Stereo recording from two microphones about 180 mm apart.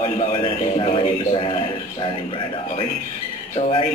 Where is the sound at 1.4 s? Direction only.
30° left (ahead or behind).